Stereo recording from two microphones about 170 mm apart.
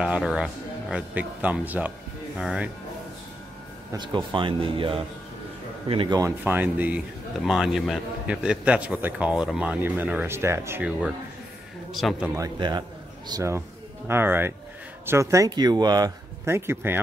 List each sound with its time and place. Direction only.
0.0 s a man's voice: 5° right (ahead or behind)
3.9 s speech: 25° right (ahead or behind)
6.4 s a man's voice: 10° right (ahead or behind)
11.9 s a man's voice: centre (ahead or behind)
12.4 s a man's voice: 25° right (ahead or behind)